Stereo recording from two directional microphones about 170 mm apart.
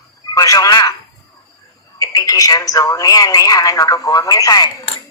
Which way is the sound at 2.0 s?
20° left (ahead or behind).